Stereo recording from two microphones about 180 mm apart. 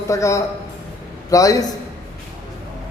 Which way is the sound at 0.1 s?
15° left (ahead or behind).